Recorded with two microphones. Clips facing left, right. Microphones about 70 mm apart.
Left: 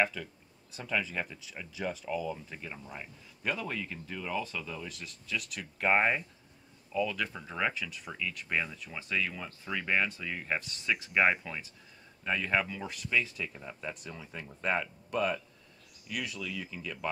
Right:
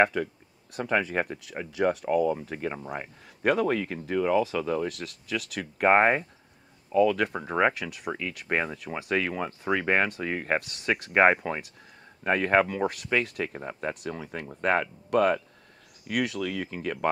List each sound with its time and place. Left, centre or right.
0.0 s speech: right
8.7 s speech: right
11.1 s speech: right